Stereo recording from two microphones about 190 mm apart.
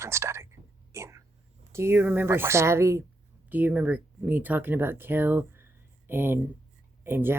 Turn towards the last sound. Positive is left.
turn(degrees=-10)  # may be behind; listen again after turning